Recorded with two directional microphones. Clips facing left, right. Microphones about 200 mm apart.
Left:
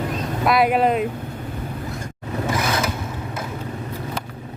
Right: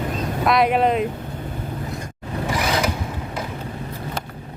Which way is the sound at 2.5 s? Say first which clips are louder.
Right 3 dB; 15° right (ahead or behind).